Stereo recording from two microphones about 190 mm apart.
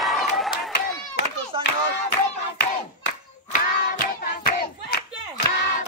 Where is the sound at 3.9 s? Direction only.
50° left (ahead or behind).